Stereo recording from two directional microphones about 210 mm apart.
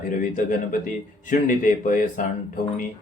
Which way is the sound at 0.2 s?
40° left (ahead or behind).